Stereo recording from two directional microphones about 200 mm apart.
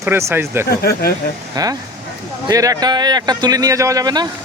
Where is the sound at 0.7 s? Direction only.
50° left (ahead or behind).